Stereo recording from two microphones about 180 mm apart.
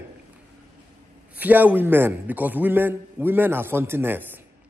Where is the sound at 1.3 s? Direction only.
10° right (ahead or behind).